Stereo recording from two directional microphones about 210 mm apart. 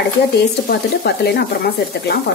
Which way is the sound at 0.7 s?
50° left (ahead or behind).